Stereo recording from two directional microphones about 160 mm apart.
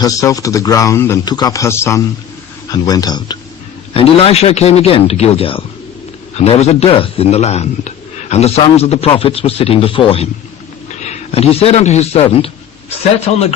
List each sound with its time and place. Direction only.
0.0 s speech: 20° left (ahead or behind)
3.9 s a man's voice: 40° left (ahead or behind)